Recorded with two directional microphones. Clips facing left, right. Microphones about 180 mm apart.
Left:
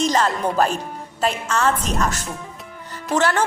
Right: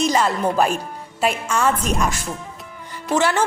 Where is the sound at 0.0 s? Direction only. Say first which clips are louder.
Right 1 dB; 10° right (ahead or behind).